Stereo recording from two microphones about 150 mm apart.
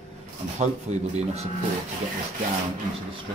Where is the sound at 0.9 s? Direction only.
50° right (ahead or behind).